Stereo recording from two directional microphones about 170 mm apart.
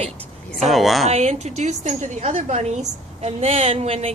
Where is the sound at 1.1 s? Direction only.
40° right (ahead or behind).